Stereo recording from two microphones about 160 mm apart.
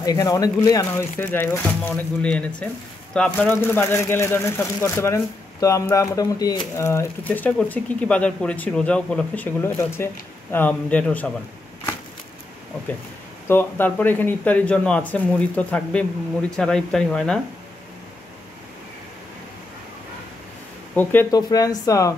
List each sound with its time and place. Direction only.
0.0 s speech: 20° left (ahead or behind)
13.5 s speech: 15° left (ahead or behind)
20.9 s speech: 10° left (ahead or behind)
21.4 s speech: 25° left (ahead or behind)